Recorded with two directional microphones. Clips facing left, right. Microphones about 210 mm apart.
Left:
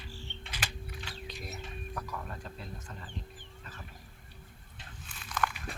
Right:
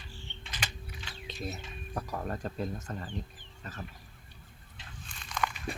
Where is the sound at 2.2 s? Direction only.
45° right (ahead or behind).